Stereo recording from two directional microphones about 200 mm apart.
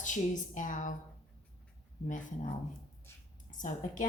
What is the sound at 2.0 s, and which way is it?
Speech, 40° left (ahead or behind).